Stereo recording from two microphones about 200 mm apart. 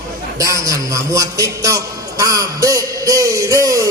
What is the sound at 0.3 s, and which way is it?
A man's voice, 15° right (ahead or behind).